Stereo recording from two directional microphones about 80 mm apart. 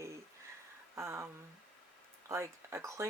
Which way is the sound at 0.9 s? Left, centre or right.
Right.